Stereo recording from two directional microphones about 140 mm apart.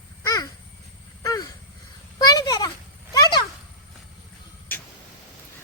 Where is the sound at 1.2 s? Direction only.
25° left (ahead or behind).